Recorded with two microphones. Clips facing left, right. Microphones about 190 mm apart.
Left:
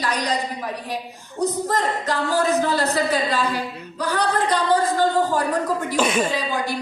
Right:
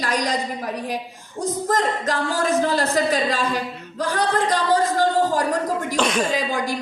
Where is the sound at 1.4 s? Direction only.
45° right (ahead or behind).